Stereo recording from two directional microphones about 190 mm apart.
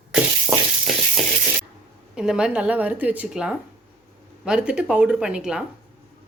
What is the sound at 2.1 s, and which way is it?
A woman's voice, 5° right (ahead or behind).